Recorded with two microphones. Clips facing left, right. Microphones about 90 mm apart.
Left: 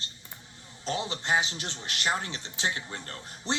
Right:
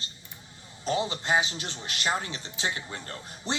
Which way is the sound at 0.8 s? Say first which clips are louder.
Right 3 dB; 15° right (ahead or behind).